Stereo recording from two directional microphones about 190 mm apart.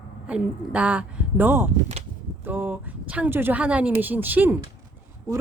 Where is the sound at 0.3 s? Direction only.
5° right (ahead or behind).